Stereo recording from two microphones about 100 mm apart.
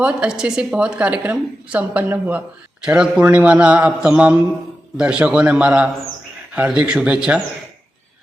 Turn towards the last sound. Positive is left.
turn(degrees=-10)  # may be behind; listen again after turning